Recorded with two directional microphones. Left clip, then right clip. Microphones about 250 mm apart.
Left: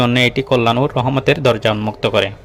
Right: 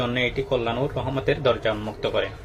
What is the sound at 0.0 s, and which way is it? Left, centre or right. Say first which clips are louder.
Speech: left 9 dB; left.